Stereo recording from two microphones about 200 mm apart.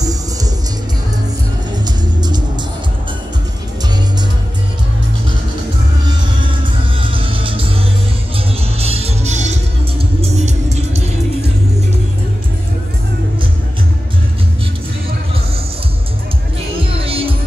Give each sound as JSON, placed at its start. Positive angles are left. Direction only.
{"t": 1.9, "sound": "music", "side_deg": -20}
{"t": 7.0, "sound": "music", "side_deg": -25}
{"t": 8.7, "sound": "music", "side_deg": -30}
{"t": 17.0, "sound": "music", "side_deg": -30}